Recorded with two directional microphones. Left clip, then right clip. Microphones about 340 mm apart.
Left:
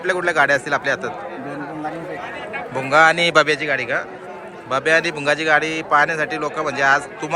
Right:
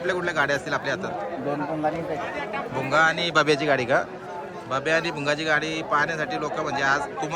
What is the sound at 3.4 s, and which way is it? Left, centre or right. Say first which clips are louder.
Speech: left 2 dB; centre.